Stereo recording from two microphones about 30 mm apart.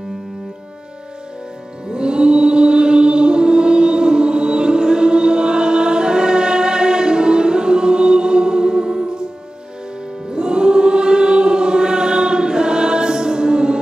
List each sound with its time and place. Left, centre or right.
1.9 s choir: right
10.3 s choir: right